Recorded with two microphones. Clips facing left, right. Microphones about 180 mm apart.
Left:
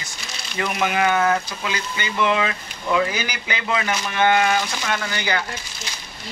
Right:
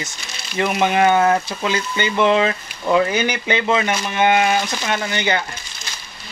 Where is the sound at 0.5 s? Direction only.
25° right (ahead or behind).